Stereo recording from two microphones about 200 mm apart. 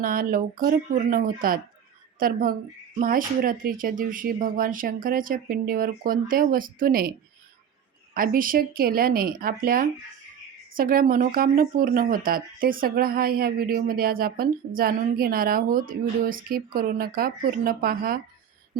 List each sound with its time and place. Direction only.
0.0 s a woman's voice: 45° right (ahead or behind)